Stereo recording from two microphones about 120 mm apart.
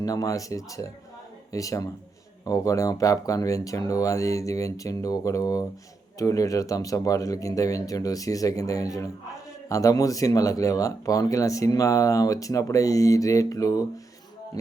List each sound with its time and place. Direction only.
0.0 s speech: 30° left (ahead or behind)